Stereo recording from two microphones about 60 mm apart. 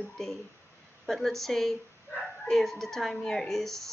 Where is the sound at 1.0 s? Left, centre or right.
Centre.